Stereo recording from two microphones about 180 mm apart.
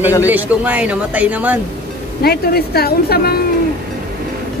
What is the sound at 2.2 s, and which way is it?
A woman's voice, 60° left (ahead or behind).